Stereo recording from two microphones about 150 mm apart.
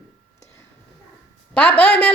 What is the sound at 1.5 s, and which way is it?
Speech, 10° left (ahead or behind).